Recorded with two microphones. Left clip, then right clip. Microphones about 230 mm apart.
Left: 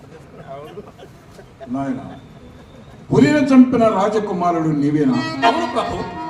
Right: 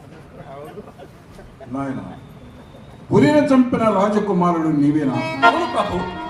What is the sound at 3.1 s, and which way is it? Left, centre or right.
A man's voice, left.